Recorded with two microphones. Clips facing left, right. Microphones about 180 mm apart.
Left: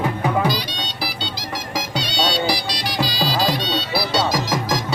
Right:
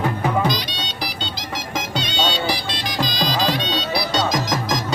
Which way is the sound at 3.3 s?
10° left (ahead or behind).